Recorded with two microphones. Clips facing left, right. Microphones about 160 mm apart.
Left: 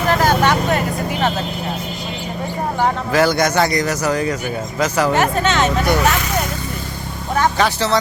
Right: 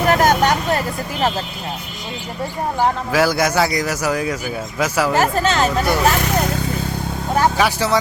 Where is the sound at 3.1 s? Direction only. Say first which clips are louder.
Left 2 dB; 5° right (ahead or behind).